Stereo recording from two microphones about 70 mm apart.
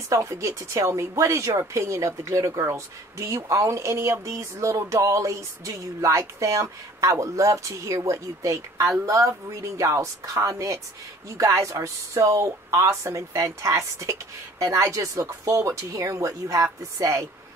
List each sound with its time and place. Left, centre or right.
0.1 s speech: right